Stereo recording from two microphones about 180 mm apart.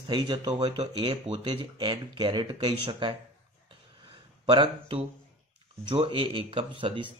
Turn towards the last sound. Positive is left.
turn(degrees=-30)  # may be behind; listen again after turning